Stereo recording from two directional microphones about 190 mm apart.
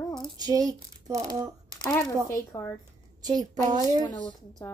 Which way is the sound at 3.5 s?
20° right (ahead or behind).